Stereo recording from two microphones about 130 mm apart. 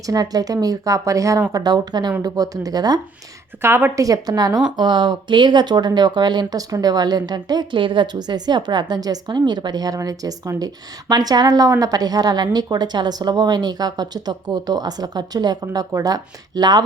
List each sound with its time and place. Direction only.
0.0 s speech: 30° right (ahead or behind)
3.6 s speech: 15° right (ahead or behind)
4.0 s speech: 30° right (ahead or behind)